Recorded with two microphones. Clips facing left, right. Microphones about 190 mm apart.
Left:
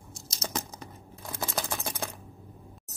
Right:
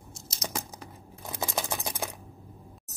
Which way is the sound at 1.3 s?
15° right (ahead or behind).